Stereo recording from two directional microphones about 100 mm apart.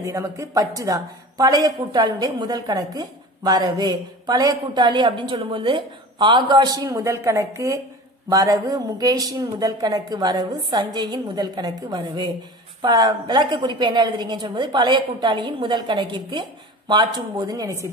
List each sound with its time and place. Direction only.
0.0 s a woman's voice: 35° right (ahead or behind); by 17.5 s 50° right (ahead or behind)
17.5 s a woman's voice: 35° right (ahead or behind)